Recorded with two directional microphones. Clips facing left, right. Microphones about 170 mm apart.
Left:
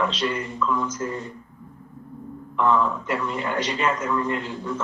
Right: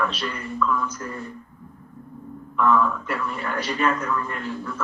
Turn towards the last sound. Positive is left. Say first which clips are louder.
# left 1 dB
turn(degrees=20)  # may be behind; listen again after turning